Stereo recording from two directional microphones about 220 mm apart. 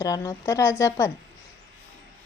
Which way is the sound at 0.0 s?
20° left (ahead or behind).